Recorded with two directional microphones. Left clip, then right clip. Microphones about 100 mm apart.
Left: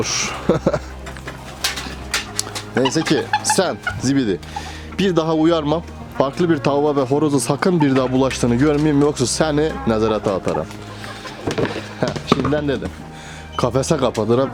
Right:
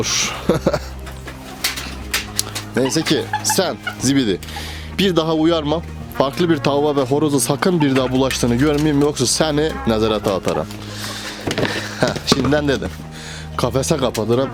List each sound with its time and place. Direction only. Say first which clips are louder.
0.0 s speech: right 1 dB; 15° right (ahead or behind)
2.9 s speech: left 1 dB; 10° right (ahead or behind)
4.0 s speech: right 3 dB; 20° right (ahead or behind)
6.1 s speech: right 1 dB; 15° right (ahead or behind)
11.5 s a sound: right 2 dB; 40° right (ahead or behind)
12.5 s speech: right 3 dB; 35° right (ahead or behind)
13.6 s speech: left 1 dB; 10° right (ahead or behind)